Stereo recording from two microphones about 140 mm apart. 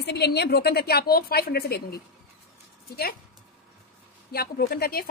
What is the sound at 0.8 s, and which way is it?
A woman's voice, 90° left.